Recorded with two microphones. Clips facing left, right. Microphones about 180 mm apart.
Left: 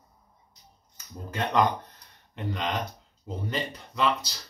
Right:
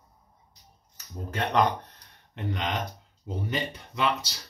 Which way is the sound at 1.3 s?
60° right (ahead or behind).